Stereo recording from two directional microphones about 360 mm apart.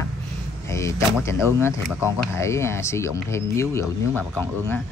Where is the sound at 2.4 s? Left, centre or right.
Centre.